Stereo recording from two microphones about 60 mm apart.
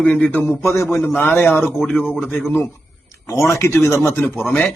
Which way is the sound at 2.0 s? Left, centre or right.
Centre.